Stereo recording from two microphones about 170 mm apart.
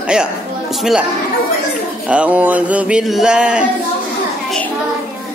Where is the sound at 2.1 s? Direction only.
10° right (ahead or behind).